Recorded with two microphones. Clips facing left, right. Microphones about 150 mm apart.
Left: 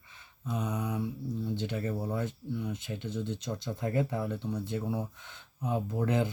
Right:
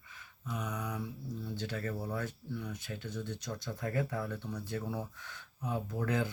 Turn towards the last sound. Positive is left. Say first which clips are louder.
# left 4 dB
turn(degrees=25)  # may be behind; listen again after turning